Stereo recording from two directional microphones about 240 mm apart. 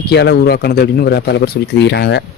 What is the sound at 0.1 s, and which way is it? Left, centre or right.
Speech, left.